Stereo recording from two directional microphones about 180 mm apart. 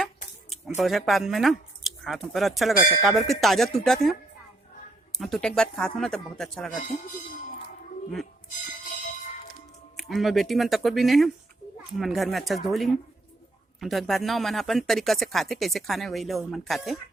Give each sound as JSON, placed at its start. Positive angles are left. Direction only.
{"t": 0.8, "sound": "speech", "side_deg": 0}
{"t": 10.0, "sound": "speech", "side_deg": 0}